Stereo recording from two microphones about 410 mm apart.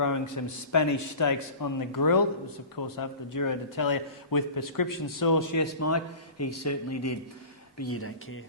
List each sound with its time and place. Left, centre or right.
0.4 s a man's voice: left